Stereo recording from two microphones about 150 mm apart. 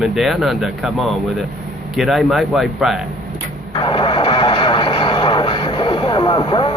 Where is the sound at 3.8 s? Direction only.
35° left (ahead or behind).